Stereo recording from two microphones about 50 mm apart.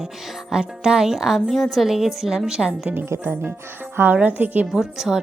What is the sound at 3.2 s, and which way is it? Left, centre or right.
Speech, right.